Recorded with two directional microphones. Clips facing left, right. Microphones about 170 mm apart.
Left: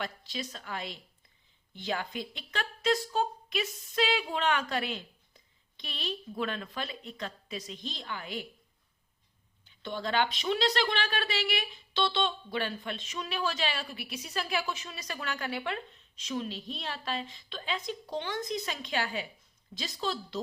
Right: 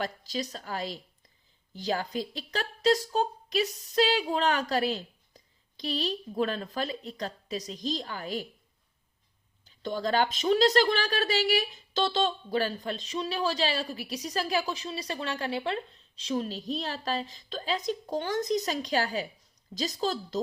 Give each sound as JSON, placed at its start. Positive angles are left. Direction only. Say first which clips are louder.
{"t": 0.0, "sound": "a woman's voice", "louder": "right 5 dB", "side_deg": -40}
{"t": 9.6, "sound": "a woman's voice", "louder": "right 5 dB", "side_deg": -40}